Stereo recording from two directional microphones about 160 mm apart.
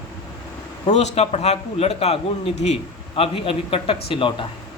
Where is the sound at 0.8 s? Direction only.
45° left (ahead or behind).